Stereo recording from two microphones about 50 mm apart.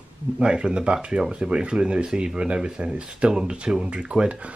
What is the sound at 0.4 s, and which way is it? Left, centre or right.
Speech, centre.